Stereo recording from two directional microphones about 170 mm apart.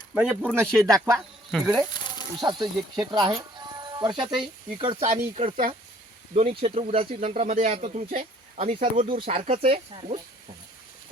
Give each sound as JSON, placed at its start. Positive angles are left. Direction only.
{"t": 0.1, "sound": "speech", "side_deg": -10}
{"t": 0.9, "sound": "speech", "side_deg": -20}
{"t": 7.4, "sound": "speech", "side_deg": -50}